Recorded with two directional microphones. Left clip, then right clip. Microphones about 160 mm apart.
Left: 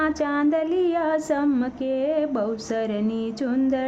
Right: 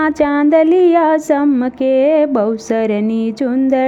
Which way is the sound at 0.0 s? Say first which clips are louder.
Right 9 dB; 45° right (ahead or behind).